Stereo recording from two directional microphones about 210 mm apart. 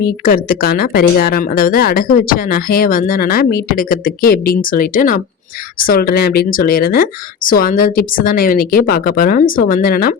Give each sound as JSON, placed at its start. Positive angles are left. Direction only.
{"t": 0.0, "sound": "a woman's voice", "side_deg": 45}